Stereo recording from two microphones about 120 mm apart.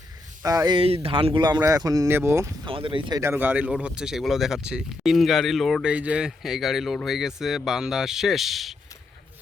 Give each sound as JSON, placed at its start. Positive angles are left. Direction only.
{"t": 0.4, "sound": "speech", "side_deg": -30}
{"t": 0.8, "sound": "speech", "side_deg": -55}
{"t": 2.0, "sound": "speech", "side_deg": -20}
{"t": 2.6, "sound": "speech", "side_deg": -45}
{"t": 3.2, "sound": "speech", "side_deg": -20}